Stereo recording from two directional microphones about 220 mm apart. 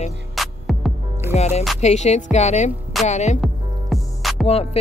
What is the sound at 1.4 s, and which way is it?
Music, 30° left (ahead or behind).